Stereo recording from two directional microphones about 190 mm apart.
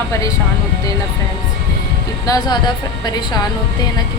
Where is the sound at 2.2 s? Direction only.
20° left (ahead or behind).